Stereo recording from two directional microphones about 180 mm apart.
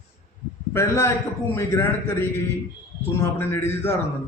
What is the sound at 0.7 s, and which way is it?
A man's voice, 15° left (ahead or behind).